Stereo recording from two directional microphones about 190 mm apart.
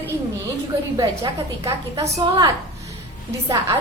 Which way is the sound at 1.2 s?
20° right (ahead or behind).